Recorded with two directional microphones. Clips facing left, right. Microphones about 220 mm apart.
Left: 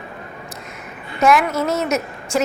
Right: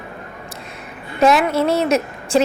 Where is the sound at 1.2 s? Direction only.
30° right (ahead or behind).